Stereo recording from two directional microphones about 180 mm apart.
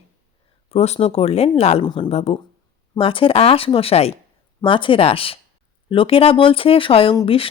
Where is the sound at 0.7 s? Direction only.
35° left (ahead or behind).